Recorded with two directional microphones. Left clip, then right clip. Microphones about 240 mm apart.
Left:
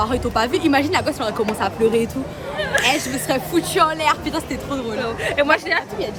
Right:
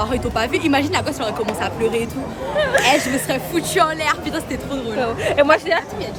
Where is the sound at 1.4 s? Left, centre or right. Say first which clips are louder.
Left 3 dB; centre.